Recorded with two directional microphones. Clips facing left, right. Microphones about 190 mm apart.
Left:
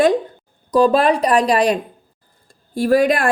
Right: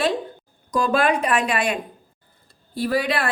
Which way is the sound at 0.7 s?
35° left (ahead or behind).